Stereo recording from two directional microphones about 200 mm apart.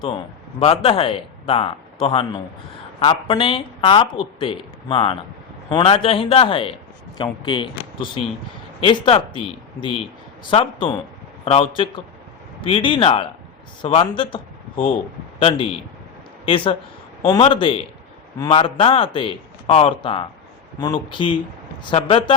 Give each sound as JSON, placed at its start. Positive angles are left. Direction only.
{"t": 0.6, "sound": "speech", "side_deg": 30}
{"t": 8.8, "sound": "speech", "side_deg": 25}
{"t": 10.5, "sound": "a man's voice", "side_deg": 25}